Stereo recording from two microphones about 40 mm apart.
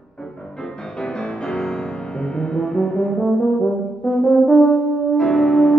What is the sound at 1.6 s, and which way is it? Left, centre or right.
Brass instrument, centre.